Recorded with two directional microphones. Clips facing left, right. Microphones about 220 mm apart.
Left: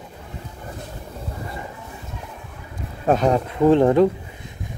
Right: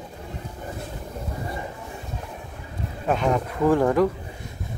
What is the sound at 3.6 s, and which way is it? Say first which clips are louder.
Speech: left 5 dB; 25° left (ahead or behind).